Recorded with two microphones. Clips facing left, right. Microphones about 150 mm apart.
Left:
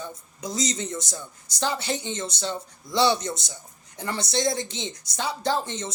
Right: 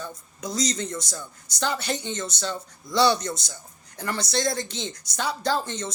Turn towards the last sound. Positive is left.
turn(degrees=25)  # may be behind; listen again after turning